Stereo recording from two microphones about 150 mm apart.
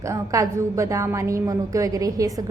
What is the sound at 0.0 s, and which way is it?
A woman's voice, 20° right (ahead or behind).